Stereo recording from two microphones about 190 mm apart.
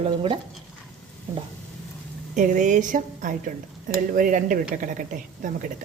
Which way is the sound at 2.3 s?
40° right (ahead or behind).